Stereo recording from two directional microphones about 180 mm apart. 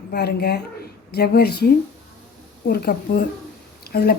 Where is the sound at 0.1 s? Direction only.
60° left (ahead or behind).